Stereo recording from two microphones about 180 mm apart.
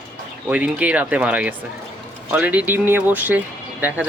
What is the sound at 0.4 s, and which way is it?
Speech, 10° right (ahead or behind).